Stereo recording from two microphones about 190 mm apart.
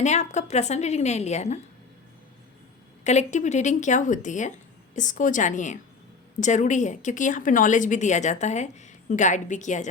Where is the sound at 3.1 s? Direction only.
40° left (ahead or behind).